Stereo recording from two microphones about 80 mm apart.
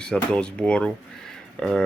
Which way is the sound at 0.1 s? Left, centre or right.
Centre.